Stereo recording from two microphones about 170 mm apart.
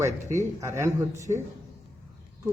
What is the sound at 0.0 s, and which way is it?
Speech, 15° right (ahead or behind).